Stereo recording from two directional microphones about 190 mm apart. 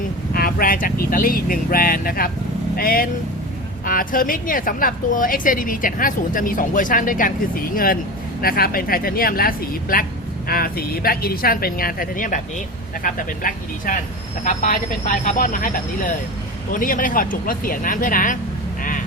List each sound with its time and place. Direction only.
0.3 s a woman's voice: 50° left (ahead or behind)
8.4 s a woman's voice: 50° left (ahead or behind)
18.8 s vehicle: 45° left (ahead or behind)